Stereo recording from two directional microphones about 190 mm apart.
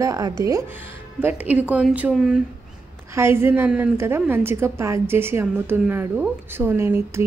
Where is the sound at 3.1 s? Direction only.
15° right (ahead or behind).